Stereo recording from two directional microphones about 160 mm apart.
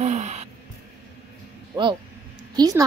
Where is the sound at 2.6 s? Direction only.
20° right (ahead or behind).